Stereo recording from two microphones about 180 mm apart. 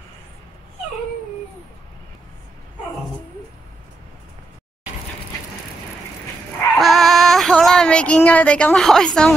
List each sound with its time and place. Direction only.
6.8 s female singing: centre (ahead or behind)